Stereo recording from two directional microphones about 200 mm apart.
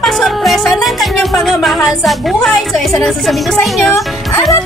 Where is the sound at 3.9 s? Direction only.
15° left (ahead or behind).